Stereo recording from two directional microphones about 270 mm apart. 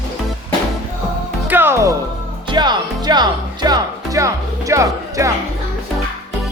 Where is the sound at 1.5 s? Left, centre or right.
Centre.